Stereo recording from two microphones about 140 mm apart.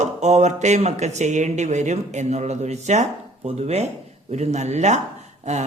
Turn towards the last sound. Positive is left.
turn(degrees=-55)  # may be behind; listen again after turning